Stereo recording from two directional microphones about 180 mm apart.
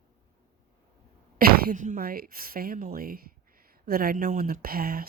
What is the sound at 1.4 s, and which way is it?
Speech, 45° right (ahead or behind).